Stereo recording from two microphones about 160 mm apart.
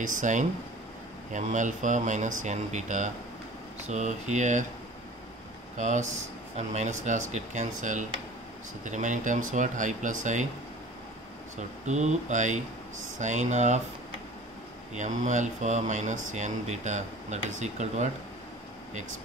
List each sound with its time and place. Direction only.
0.0 s speech: 50° right (ahead or behind)
5.8 s speech: 45° right (ahead or behind)
11.5 s speech: 45° right (ahead or behind)
15.0 s speech: 50° right (ahead or behind)